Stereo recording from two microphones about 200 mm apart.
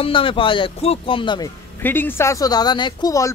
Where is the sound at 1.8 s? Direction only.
10° left (ahead or behind).